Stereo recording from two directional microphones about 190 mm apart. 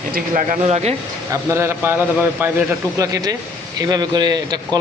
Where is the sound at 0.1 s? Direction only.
45° right (ahead or behind).